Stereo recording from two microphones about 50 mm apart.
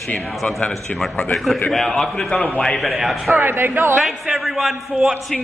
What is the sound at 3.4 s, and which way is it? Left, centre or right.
Speech, right.